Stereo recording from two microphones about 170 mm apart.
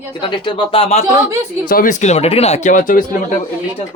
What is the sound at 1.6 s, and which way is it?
Speech, 55° left (ahead or behind).